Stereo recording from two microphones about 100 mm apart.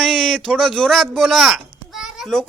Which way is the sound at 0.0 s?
5° left (ahead or behind).